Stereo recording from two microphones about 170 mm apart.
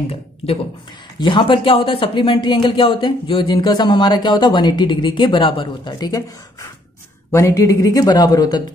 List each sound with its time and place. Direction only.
1.2 s speech: 30° left (ahead or behind)
7.2 s speech: 15° left (ahead or behind)